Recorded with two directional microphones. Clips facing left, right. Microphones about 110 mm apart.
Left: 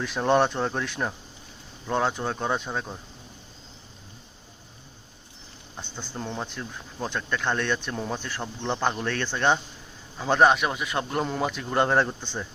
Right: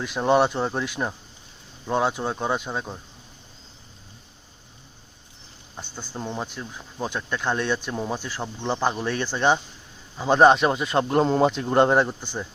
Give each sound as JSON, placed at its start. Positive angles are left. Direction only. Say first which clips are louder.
{"t": 0.0, "sound": "speech", "louder": "right 2 dB", "side_deg": -5}
{"t": 5.7, "sound": "speech", "louder": "right 1 dB", "side_deg": -5}